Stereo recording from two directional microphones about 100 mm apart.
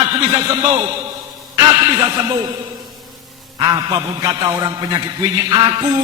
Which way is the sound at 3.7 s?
40° right (ahead or behind).